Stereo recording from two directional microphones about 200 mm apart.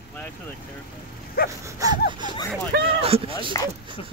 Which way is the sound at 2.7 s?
50° right (ahead or behind).